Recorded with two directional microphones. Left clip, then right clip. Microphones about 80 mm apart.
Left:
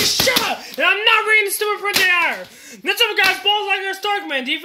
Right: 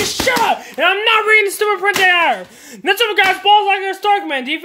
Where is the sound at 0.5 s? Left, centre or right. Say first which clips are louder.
Right 3 dB; right.